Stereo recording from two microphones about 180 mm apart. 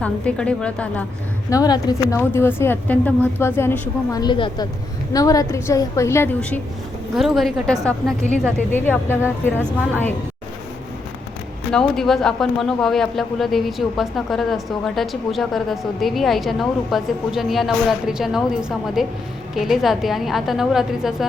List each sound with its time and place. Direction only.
0.0 s a woman's voice: 5° left (ahead or behind)
1.5 s a woman's voice: 20° left (ahead or behind)
11.7 s speech: 5° left (ahead or behind)